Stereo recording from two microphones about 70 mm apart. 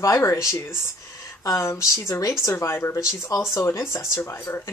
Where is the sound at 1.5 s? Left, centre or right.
Left.